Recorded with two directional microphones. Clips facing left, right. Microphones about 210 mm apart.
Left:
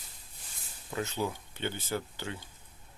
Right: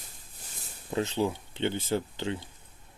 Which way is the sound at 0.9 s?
30° right (ahead or behind).